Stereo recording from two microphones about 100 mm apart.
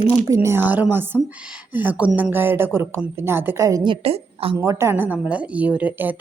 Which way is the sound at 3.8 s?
75° right (ahead or behind).